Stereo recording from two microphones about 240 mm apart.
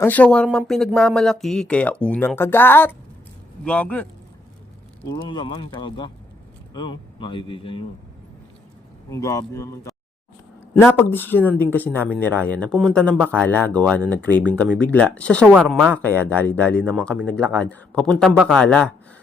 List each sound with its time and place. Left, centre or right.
0.0 s speech: centre
5.0 s speech: centre
9.0 s speech: centre
10.9 s speech: centre